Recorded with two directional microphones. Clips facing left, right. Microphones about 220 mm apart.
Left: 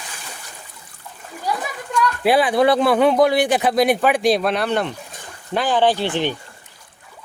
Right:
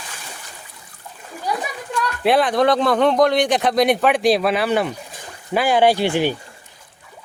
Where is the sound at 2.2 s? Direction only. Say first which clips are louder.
Even; 5° left (ahead or behind).